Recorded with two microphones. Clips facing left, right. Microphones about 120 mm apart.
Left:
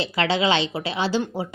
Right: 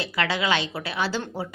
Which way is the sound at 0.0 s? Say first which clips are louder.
Left 4 dB; 25° left (ahead or behind).